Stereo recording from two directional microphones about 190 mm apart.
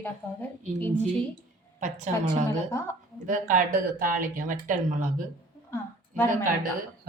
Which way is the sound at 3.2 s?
40° right (ahead or behind).